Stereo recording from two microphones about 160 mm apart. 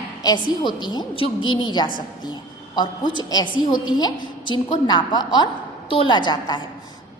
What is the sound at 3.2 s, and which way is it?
A woman's voice, 25° left (ahead or behind).